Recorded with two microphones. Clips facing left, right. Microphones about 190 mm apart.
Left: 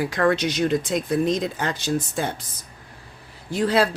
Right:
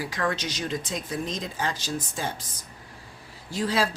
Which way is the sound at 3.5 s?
60° left (ahead or behind).